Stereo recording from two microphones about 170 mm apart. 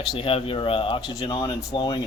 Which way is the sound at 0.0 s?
30° left (ahead or behind).